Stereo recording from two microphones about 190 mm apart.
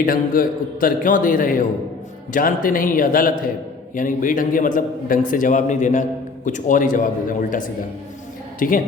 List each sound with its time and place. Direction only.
0.0 s a man's voice: 50° left (ahead or behind)